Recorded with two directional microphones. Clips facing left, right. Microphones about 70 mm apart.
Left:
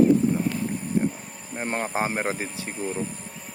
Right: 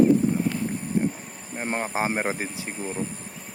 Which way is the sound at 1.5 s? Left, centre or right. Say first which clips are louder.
Even; centre.